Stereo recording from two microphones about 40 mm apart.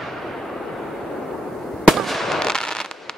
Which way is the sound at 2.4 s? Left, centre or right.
Centre.